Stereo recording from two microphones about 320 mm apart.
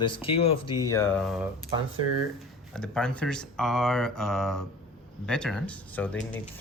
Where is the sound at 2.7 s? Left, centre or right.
Centre.